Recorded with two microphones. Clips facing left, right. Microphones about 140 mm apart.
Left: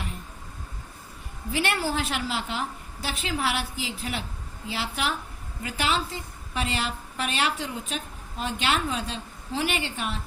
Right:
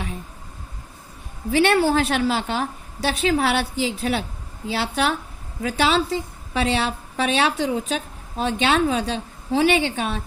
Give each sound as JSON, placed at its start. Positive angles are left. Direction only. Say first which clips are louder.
{"t": 1.5, "sound": "a woman's voice", "louder": "right 10 dB", "side_deg": -75}
{"t": 5.6, "sound": "a woman's voice", "louder": "right 8 dB", "side_deg": -90}